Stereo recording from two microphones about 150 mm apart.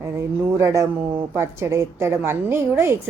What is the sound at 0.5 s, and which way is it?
Speech, 20° right (ahead or behind).